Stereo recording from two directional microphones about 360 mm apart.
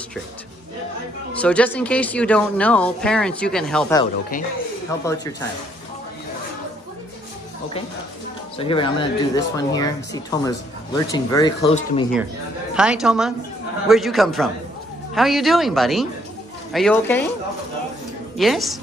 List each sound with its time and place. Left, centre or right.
1.3 s speech: centre
4.0 s speech: left
8.5 s speech: centre
12.7 s speech: centre
18.4 s speech: centre